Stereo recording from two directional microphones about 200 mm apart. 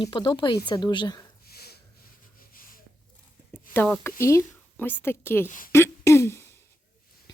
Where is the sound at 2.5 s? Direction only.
45° left (ahead or behind).